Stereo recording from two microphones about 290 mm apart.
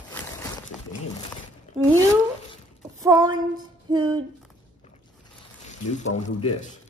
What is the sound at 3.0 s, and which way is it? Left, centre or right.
Speech, centre.